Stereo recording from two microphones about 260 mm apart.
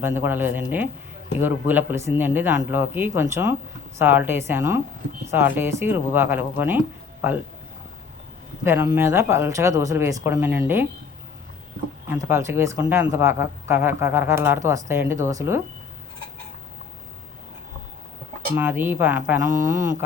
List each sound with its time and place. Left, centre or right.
0.0 s speech: centre
8.6 s speech: centre
12.0 s speech: centre
18.5 s speech: centre